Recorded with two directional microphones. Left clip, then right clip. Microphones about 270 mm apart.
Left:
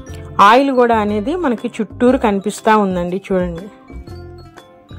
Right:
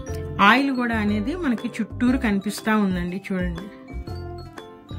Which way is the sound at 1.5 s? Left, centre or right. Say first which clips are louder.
Left 9 dB; centre.